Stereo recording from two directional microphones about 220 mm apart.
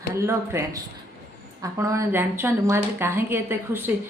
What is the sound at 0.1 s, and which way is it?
A woman's voice, 10° right (ahead or behind).